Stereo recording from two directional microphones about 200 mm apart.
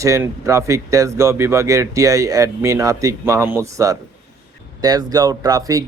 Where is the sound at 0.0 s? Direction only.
15° right (ahead or behind).